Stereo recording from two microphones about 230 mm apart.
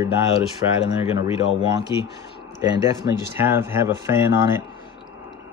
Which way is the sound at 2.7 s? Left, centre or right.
Centre.